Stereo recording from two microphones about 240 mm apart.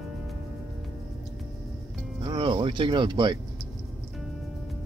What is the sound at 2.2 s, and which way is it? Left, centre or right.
Music, centre.